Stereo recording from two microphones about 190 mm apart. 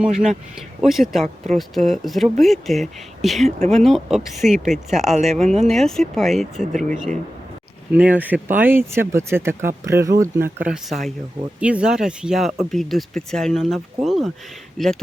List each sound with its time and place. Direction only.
0.0 s speech: 5° right (ahead or behind)
5.1 s speech: 35° right (ahead or behind)
5.6 s speech: centre (ahead or behind)